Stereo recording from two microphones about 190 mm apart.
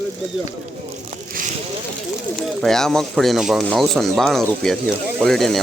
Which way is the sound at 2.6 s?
5° left (ahead or behind).